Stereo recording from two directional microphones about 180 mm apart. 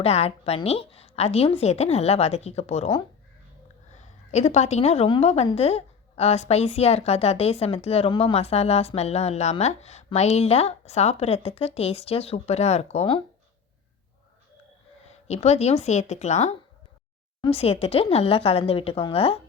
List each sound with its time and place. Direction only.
0.0 s a woman's voice: 35° left (ahead or behind)
15.0 s a woman's voice: 35° left (ahead or behind)